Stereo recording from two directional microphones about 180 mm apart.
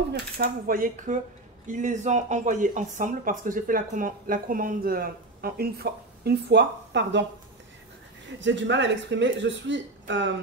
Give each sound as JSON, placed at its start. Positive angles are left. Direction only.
{"t": 0.4, "sound": "speech", "side_deg": -50}
{"t": 8.4, "sound": "speech", "side_deg": -90}